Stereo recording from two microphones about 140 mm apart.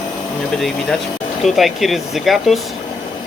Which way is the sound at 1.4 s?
Centre (ahead or behind).